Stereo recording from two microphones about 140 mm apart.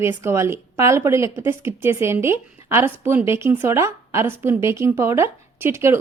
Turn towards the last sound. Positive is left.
turn(degrees=-20)  # may be behind; listen again after turning